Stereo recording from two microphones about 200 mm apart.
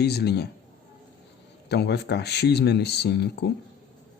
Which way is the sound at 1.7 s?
55° left (ahead or behind).